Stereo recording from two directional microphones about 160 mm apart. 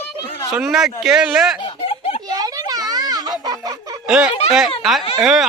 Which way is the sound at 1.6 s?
35° left (ahead or behind).